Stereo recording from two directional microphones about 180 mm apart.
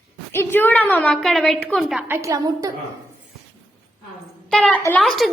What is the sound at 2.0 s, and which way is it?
Speech, 15° right (ahead or behind).